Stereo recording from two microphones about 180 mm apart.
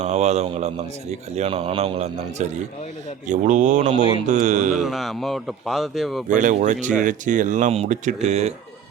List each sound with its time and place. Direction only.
0.0 s a man's voice: 40° right (ahead or behind)
4.7 s speech: centre (ahead or behind)
6.2 s speech: 45° right (ahead or behind)